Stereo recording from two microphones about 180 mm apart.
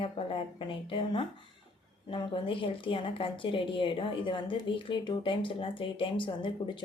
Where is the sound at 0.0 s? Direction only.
30° left (ahead or behind).